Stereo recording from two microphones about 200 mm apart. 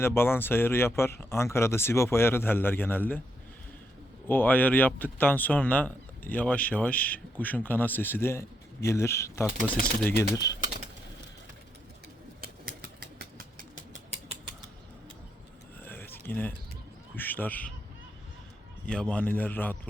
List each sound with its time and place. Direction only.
0.0 s speech: 10° left (ahead or behind)
4.3 s speech: 10° left (ahead or behind)
12.4 s typewriter: 50° right (ahead or behind)
15.8 s a sound: 10° left (ahead or behind)
17.2 s speech: 10° left (ahead or behind)
18.9 s speech: 5° left (ahead or behind)